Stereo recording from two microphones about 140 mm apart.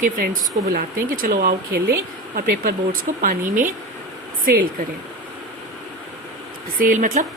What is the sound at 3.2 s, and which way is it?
Speech, 75° right (ahead or behind).